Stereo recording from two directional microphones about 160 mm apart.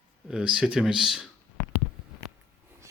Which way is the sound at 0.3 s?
5° right (ahead or behind).